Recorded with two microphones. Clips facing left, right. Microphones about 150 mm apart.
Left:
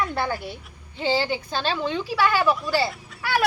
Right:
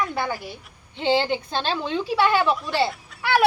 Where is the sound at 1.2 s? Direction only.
25° right (ahead or behind).